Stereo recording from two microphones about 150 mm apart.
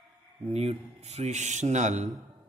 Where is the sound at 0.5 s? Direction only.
45° right (ahead or behind).